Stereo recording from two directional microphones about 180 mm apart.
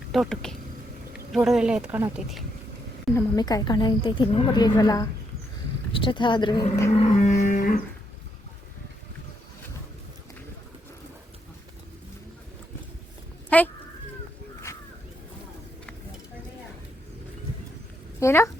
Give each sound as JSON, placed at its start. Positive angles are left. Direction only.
{"t": 0.1, "sound": "speech", "side_deg": 0}
{"t": 3.2, "sound": "a woman's voice", "side_deg": 20}
{"t": 7.0, "sound": "livestock", "side_deg": 40}
{"t": 13.5, "sound": "a sound", "side_deg": 10}
{"t": 18.2, "sound": "speech", "side_deg": 15}